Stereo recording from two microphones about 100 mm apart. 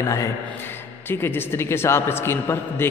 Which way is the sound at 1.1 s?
20° left (ahead or behind).